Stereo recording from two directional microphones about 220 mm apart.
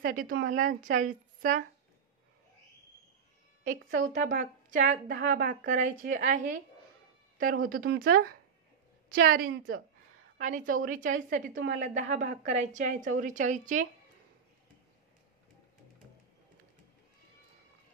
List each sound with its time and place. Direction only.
0.0 s a woman's voice: 40° right (ahead or behind)
4.0 s a woman's voice: 35° right (ahead or behind)